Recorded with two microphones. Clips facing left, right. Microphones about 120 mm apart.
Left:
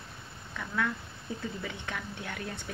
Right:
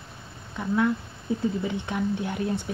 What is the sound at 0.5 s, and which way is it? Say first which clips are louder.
A woman's voice: right 9 dB; 25° right (ahead or behind).